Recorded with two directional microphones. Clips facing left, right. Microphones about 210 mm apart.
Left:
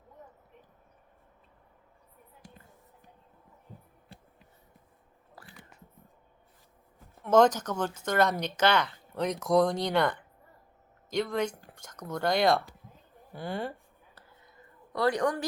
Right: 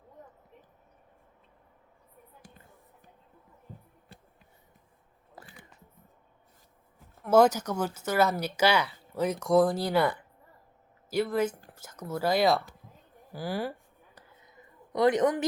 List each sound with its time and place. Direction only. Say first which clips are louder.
5.4 s biting: right 2 dB; 20° right (ahead or behind)
7.2 s speech: right 1 dB; 10° right (ahead or behind)
14.9 s a woman's voice: right 4 dB; 20° right (ahead or behind)